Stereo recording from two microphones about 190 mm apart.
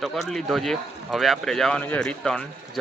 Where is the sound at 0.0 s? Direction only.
Centre (ahead or behind).